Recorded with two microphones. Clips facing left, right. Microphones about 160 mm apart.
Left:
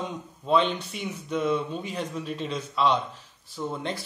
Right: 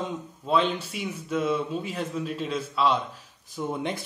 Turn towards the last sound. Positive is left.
turn(degrees=-15)  # may be behind; listen again after turning